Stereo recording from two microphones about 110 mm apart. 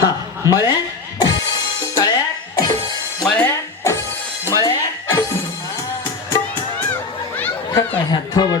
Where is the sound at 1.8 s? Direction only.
35° left (ahead or behind).